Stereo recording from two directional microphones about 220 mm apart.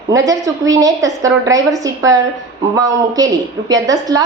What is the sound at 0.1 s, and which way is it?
A woman's voice, 15° right (ahead or behind).